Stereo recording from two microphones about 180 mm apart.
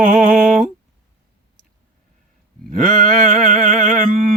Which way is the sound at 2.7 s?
45° right (ahead or behind).